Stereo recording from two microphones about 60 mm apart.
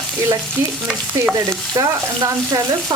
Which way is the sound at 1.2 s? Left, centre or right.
Right.